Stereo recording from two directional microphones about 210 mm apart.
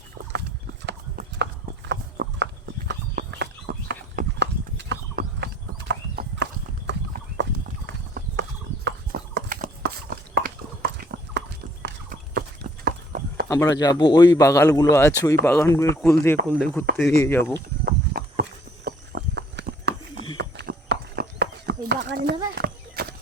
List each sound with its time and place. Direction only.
1.4 s clip-clop: 55° right (ahead or behind)
1.9 s horse: 55° right (ahead or behind)
5.9 s clip-clop: 55° right (ahead or behind)
10.9 s horse: 55° right (ahead or behind)
13.5 s speech: 15° left (ahead or behind)
17.8 s a sound: 50° right (ahead or behind)
18.9 s horse: 50° right (ahead or behind)
20.4 s clip-clop: 55° right (ahead or behind)
22.5 s horse: 50° right (ahead or behind)